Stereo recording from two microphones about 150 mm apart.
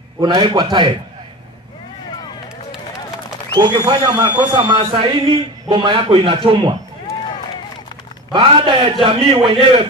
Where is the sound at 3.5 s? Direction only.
30° right (ahead or behind).